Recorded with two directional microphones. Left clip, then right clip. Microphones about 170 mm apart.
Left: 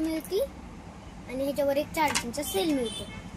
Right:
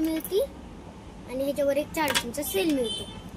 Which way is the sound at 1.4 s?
20° left (ahead or behind).